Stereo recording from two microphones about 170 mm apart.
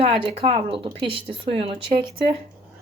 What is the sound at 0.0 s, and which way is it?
Speech, 35° right (ahead or behind).